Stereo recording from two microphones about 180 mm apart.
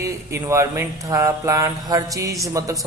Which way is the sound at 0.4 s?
15° right (ahead or behind).